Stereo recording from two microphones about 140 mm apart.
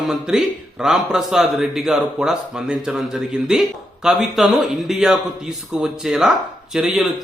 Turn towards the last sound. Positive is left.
turn(degrees=0)  # may be behind; listen again after turning